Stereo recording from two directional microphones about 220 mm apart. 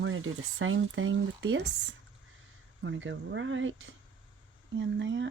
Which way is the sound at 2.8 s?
60° right (ahead or behind).